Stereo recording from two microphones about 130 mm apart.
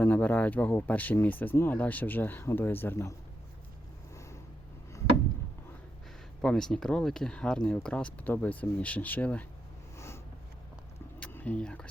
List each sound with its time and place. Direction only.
0.0 s speech: 15° left (ahead or behind)
4.1 s vehicle: 20° left (ahead or behind)
6.4 s speech: 5° left (ahead or behind)
11.2 s a sound: 15° left (ahead or behind)